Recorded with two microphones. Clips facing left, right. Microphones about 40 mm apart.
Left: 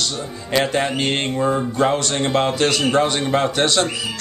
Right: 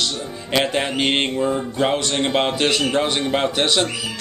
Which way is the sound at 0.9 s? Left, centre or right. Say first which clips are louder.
Right 1 dB; right.